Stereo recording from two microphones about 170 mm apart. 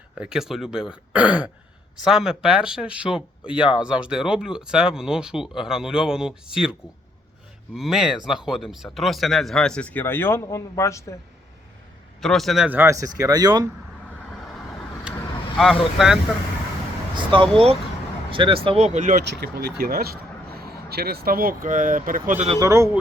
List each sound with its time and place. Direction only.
0.2 s speech: 5° right (ahead or behind); by 11.1 s 15° left (ahead or behind)
12.2 s speech: centre (ahead or behind); by 13.7 s 20° right (ahead or behind)
15.5 s speech: centre (ahead or behind)
17.2 s speech: 30° right (ahead or behind)
18.9 s speech: 45° right (ahead or behind)
19.2 s speech: 70° right (ahead or behind); by 22.4 s 55° right (ahead or behind)
22.6 s speech: 15° right (ahead or behind)